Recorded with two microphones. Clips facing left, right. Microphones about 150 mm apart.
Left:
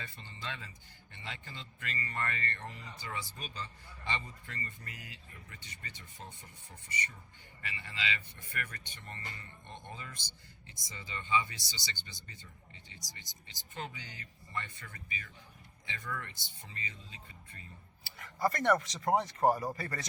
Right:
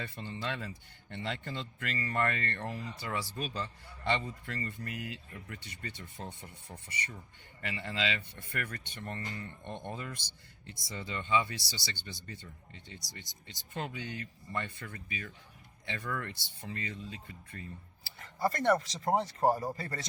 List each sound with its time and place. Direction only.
0.0 s speech: 70° right (ahead or behind)
15.9 s speech: 60° right (ahead or behind)
18.0 s speech: 30° right (ahead or behind)